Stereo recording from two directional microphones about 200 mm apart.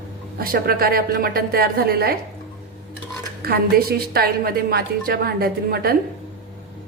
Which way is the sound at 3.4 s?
50° right (ahead or behind).